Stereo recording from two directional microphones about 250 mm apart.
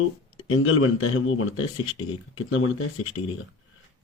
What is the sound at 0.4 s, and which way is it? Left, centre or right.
Speech, left.